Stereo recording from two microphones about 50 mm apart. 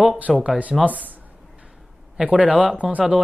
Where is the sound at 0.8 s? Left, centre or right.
Right.